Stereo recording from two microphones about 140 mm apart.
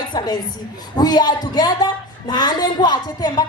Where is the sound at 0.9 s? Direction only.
30° left (ahead or behind).